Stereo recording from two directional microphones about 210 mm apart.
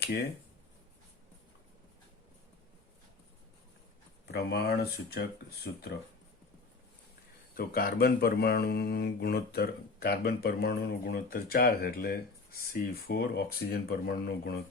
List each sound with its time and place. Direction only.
4.3 s speech: 50° left (ahead or behind)
7.5 s speech: 45° left (ahead or behind)